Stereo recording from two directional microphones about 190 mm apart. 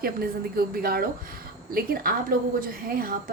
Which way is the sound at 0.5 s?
50° right (ahead or behind).